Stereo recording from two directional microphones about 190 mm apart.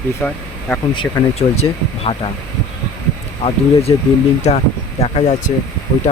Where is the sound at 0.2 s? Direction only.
5° left (ahead or behind).